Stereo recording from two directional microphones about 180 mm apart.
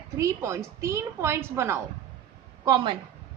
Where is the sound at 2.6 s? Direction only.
25° right (ahead or behind).